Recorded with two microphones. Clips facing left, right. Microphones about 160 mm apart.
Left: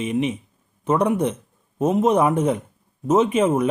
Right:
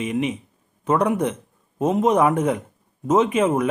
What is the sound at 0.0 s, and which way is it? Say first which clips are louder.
Speech: left 1 dB; 25° left (ahead or behind).